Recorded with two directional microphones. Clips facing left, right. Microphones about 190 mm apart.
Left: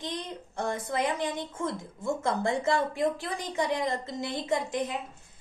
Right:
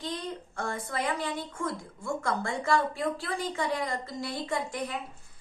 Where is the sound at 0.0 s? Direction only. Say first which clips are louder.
Right 1 dB; 20° left (ahead or behind).